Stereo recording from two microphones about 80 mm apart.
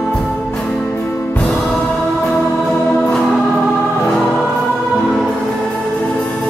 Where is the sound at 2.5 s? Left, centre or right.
Centre.